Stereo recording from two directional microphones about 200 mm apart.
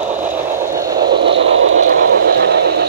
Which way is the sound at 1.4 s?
75° right (ahead or behind).